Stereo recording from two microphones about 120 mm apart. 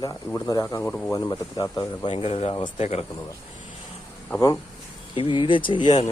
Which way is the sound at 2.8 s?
65° left (ahead or behind).